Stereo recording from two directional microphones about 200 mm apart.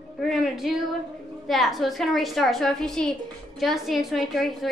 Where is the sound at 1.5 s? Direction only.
Centre (ahead or behind).